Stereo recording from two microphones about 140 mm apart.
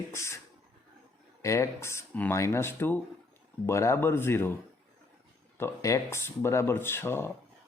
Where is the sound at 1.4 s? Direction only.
20° left (ahead or behind).